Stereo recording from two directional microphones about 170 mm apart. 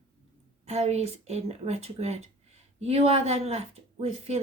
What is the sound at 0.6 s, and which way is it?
Speech, 40° right (ahead or behind).